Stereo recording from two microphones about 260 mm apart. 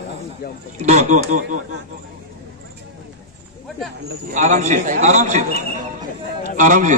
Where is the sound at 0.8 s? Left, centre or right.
Right.